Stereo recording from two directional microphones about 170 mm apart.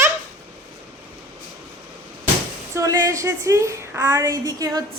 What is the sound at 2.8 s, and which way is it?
A woman's voice, 20° right (ahead or behind).